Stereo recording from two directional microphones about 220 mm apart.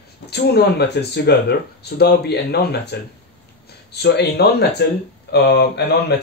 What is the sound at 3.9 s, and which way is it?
Speech, 50° left (ahead or behind).